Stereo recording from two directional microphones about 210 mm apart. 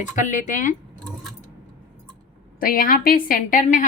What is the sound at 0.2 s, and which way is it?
Speech, 40° left (ahead or behind).